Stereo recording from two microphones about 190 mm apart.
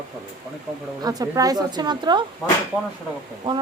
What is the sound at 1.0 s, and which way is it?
Speech, 20° right (ahead or behind).